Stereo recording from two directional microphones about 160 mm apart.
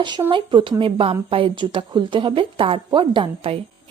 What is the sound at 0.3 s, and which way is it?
A woman's voice, 30° right (ahead or behind).